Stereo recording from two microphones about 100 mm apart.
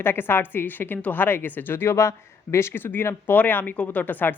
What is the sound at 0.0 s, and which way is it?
A woman's voice, 20° left (ahead or behind).